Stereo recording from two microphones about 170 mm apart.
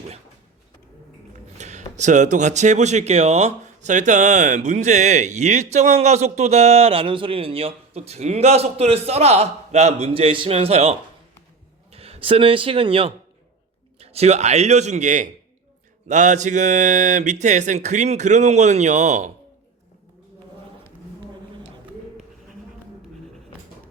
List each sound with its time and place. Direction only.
1.5 s speech: 45° right (ahead or behind)